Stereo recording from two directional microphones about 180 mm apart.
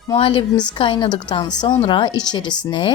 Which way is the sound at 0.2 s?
30° left (ahead or behind).